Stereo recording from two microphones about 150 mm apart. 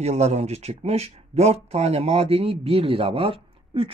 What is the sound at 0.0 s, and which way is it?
Speech, 45° right (ahead or behind).